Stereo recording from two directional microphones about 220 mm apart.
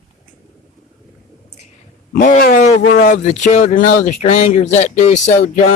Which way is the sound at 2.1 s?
40° left (ahead or behind).